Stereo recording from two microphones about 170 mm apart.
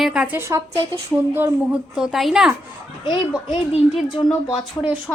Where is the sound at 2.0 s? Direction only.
Centre (ahead or behind).